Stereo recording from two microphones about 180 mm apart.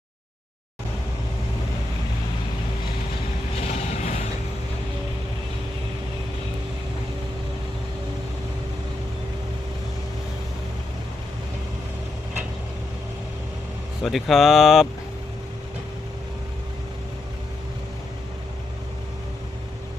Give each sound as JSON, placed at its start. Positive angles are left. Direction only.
{"t": 3.7, "sound": "vehicle", "side_deg": 35}
{"t": 14.0, "sound": "speech", "side_deg": 0}